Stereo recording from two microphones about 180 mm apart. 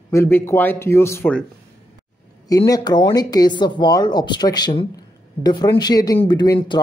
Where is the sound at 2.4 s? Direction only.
20° left (ahead or behind).